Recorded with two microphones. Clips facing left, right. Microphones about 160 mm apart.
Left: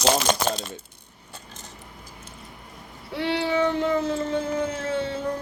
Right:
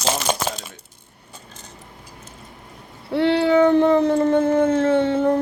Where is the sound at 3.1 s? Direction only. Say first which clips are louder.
Right 8 dB; 60° right (ahead or behind).